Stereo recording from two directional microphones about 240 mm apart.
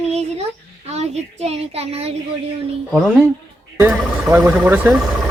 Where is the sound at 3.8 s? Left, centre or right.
Centre.